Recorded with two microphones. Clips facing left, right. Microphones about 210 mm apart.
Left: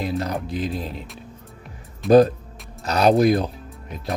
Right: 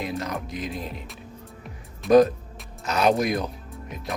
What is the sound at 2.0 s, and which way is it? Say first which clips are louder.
Speech: left 2 dB; 30° left (ahead or behind).